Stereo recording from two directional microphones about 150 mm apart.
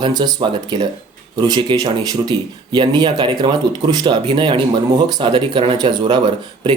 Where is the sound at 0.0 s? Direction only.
25° right (ahead or behind).